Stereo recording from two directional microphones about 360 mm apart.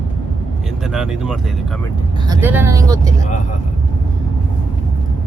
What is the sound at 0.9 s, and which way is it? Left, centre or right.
Speech, centre.